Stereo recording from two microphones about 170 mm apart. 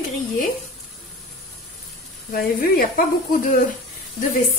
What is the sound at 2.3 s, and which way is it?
Speech, 60° left (ahead or behind).